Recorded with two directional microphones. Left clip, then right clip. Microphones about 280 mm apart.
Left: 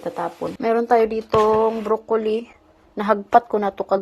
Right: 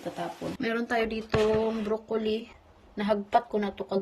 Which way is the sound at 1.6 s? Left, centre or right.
Left.